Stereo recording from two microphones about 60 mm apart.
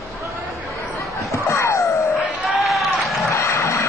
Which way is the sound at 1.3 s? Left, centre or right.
Left.